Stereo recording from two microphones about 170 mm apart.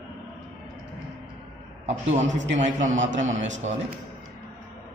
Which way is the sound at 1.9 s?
40° right (ahead or behind).